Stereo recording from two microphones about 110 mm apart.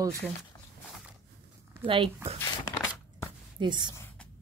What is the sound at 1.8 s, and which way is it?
Speech, 55° right (ahead or behind).